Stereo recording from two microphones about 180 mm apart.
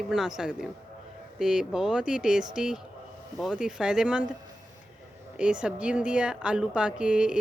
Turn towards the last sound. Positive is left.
turn(degrees=-5)  # may be behind; listen again after turning